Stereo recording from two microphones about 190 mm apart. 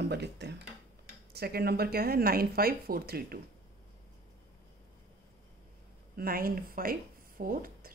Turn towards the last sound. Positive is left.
turn(degrees=-50)  # may be behind; listen again after turning